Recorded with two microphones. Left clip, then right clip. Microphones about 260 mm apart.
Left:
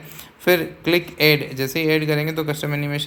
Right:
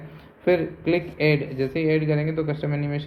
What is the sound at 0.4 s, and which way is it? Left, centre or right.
Speech, centre.